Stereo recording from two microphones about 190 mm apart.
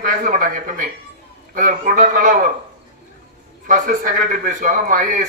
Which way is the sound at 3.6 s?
45° right (ahead or behind).